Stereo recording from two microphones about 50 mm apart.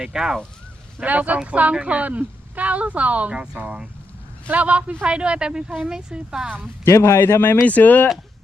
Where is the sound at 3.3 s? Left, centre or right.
Centre.